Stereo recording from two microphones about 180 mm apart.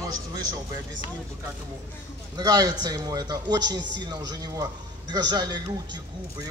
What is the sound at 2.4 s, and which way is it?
A man's voice, 20° right (ahead or behind).